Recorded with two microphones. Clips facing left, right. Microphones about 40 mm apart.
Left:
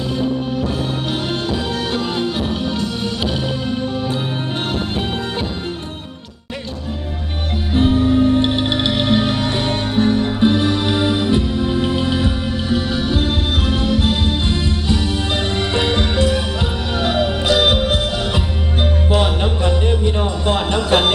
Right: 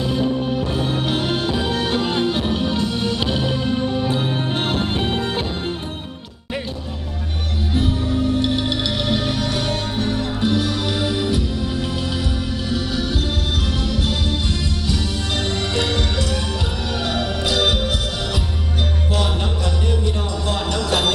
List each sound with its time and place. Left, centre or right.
0.1 s music: centre
7.7 s music: left
17.8 s music: left